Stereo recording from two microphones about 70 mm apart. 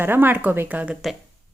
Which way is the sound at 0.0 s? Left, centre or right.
Right.